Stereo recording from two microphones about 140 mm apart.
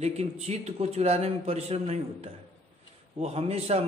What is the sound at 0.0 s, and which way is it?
A man's voice, 50° right (ahead or behind).